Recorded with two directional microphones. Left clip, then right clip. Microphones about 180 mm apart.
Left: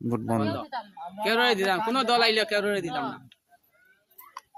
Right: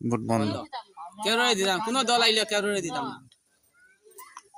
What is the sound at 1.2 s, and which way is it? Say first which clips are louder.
A man's voice: left 1 dB; 35° right (ahead or behind).